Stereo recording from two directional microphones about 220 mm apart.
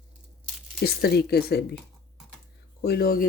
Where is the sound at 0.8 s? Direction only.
45° left (ahead or behind).